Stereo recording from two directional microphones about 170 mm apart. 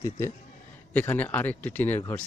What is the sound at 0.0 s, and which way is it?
Speech, 20° left (ahead or behind).